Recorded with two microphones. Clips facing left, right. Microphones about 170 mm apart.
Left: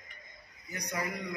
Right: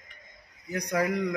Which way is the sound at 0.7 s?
90° right.